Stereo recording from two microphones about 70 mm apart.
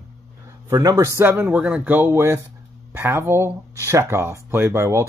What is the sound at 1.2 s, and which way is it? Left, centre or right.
Speech, right.